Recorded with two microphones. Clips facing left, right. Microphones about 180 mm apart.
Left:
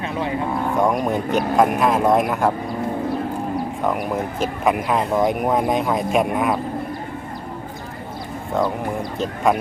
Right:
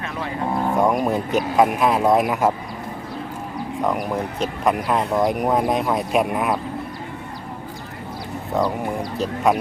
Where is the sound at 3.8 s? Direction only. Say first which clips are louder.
Right 2 dB; centre (ahead or behind).